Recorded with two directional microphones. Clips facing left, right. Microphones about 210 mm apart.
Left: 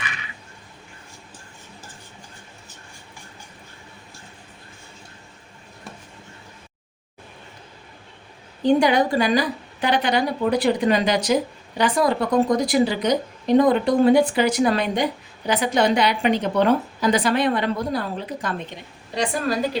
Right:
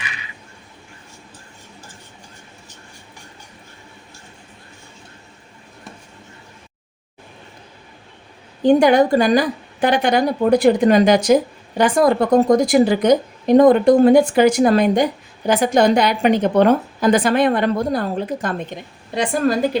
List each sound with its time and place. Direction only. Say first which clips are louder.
8.6 s a woman's voice: right 5 dB; 50° right (ahead or behind)